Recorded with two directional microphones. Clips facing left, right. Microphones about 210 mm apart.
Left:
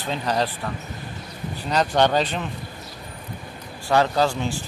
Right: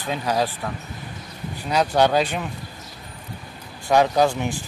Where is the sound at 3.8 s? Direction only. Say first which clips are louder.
Right 2 dB; 15° right (ahead or behind).